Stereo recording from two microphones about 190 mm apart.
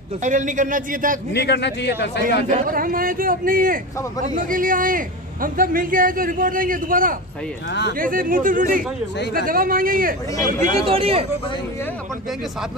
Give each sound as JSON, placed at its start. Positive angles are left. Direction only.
{"t": 0.2, "sound": "a man's voice", "side_deg": -40}
{"t": 1.3, "sound": "a man's voice", "side_deg": 60}
{"t": 2.6, "sound": "a man's voice", "side_deg": -50}
{"t": 10.3, "sound": "speech", "side_deg": 20}
{"t": 10.9, "sound": "speech", "side_deg": -30}